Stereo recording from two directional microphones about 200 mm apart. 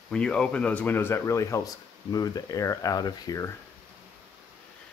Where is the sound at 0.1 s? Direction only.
5° left (ahead or behind).